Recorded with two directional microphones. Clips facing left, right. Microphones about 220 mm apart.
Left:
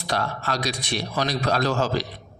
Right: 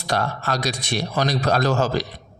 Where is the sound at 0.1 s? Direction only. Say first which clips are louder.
Right 3 dB; 45° right (ahead or behind).